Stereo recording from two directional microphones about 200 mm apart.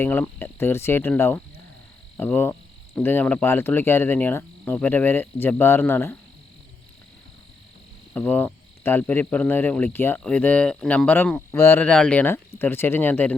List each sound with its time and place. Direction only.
0.0 s cricket: 10° left (ahead or behind)
8.1 s cricket: 10° left (ahead or behind)